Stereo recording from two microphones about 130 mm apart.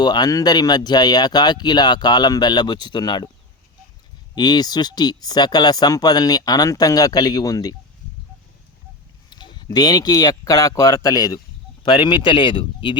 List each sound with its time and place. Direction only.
0.0 s speech: 30° left (ahead or behind)
4.4 s speech: 30° left (ahead or behind)
9.3 s speech: 35° left (ahead or behind)